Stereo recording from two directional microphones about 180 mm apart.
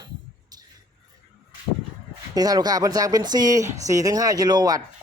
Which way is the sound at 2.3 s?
20° right (ahead or behind).